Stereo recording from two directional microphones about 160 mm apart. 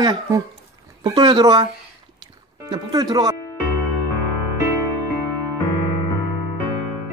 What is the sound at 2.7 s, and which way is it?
Speech, 25° right (ahead or behind).